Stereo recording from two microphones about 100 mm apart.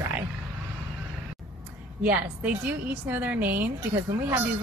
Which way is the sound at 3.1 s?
15° right (ahead or behind).